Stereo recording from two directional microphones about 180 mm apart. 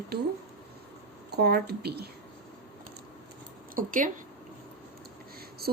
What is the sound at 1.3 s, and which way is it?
Speech, 60° right (ahead or behind).